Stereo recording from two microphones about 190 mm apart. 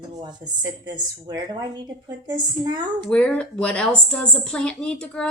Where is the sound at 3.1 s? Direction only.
5° left (ahead or behind).